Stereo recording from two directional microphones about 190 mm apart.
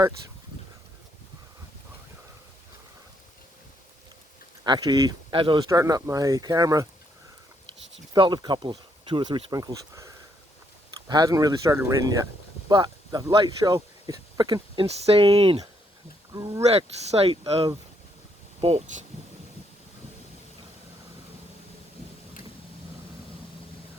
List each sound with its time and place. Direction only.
4.6 s speech: 20° right (ahead or behind)
8.1 s speech: 25° right (ahead or behind)
11.1 s speech: 20° right (ahead or behind)
16.3 s speech: 20° right (ahead or behind)
16.6 s speech: 35° right (ahead or behind)